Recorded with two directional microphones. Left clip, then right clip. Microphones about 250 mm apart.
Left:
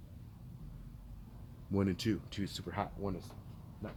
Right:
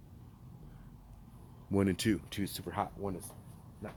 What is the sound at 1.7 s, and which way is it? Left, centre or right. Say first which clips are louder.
Speech: right 4 dB; right.